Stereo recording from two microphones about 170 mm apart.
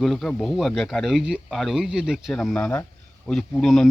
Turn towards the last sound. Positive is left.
turn(degrees=0)  # may be behind; listen again after turning